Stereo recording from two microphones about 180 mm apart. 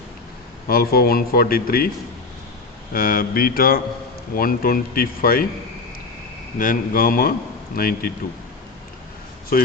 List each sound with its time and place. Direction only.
0.7 s speech: 55° left (ahead or behind)
2.9 s speech: 55° left (ahead or behind)
6.6 s speech: 50° left (ahead or behind)